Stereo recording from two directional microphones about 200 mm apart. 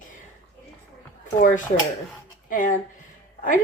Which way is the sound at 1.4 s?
40° left (ahead or behind).